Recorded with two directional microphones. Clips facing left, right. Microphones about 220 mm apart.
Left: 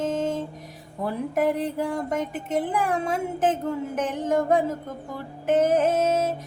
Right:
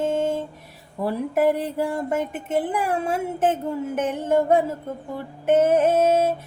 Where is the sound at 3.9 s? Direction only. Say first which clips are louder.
Right 2 dB; 5° right (ahead or behind).